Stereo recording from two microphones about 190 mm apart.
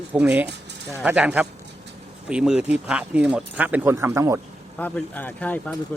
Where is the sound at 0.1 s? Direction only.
10° right (ahead or behind).